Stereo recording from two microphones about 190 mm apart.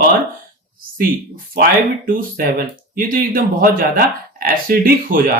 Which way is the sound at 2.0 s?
45° right (ahead or behind).